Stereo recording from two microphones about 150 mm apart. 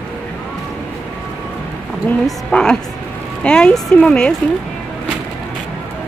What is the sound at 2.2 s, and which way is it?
A woman's voice, 5° left (ahead or behind).